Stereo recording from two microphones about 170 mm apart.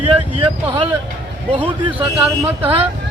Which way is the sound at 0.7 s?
30° right (ahead or behind).